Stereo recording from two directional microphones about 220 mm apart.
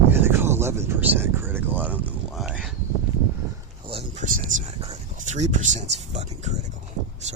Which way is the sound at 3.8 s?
25° right (ahead or behind).